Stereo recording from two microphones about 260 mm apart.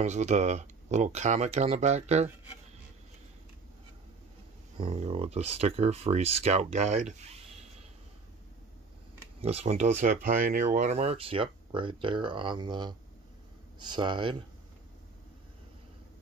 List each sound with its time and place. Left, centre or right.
0.0 s speech: right
4.7 s speech: right
9.4 s speech: right